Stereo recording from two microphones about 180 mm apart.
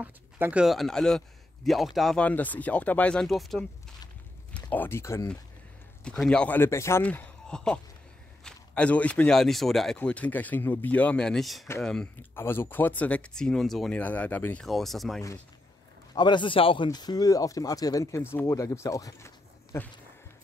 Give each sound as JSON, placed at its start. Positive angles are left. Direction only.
{"t": 0.0, "sound": "speech", "side_deg": -10}
{"t": 6.0, "sound": "speech", "side_deg": 5}
{"t": 16.2, "sound": "speech", "side_deg": 25}